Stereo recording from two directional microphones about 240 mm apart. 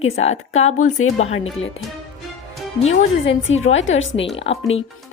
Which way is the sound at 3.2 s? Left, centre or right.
Left.